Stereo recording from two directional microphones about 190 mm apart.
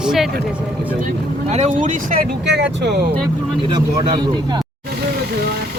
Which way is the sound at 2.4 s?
65° right (ahead or behind).